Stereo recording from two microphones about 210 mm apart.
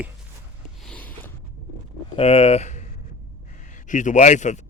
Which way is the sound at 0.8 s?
5° left (ahead or behind).